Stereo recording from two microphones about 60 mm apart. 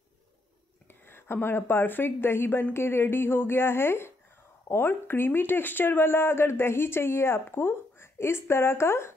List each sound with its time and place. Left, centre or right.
0.8 s a woman's voice: left